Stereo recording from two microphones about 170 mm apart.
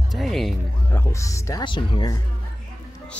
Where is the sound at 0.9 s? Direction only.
20° left (ahead or behind).